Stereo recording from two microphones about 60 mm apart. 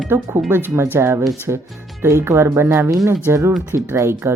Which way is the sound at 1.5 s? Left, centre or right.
Right.